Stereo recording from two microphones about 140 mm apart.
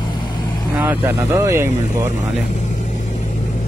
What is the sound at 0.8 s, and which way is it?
Speech, 15° right (ahead or behind).